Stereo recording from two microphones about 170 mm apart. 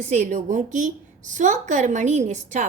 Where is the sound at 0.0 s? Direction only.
45° right (ahead or behind).